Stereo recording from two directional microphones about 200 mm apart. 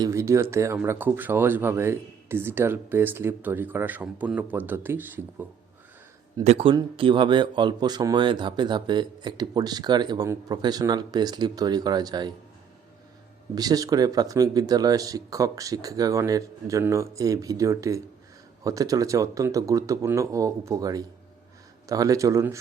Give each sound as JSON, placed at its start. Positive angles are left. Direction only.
{"t": 0.0, "sound": "speech", "side_deg": -15}
{"t": 6.4, "sound": "speech", "side_deg": -30}
{"t": 13.6, "sound": "speech", "side_deg": -20}